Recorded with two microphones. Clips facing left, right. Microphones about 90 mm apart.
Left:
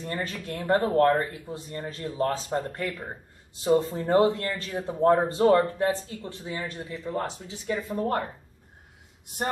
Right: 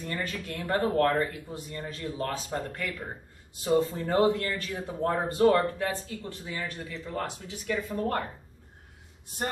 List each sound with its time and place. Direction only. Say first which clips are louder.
0.0 s speech: left 2 dB; 25° left (ahead or behind)